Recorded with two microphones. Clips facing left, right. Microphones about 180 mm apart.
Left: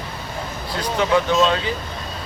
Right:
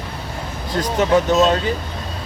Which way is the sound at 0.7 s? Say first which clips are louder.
Right 3 dB; 45° right (ahead or behind).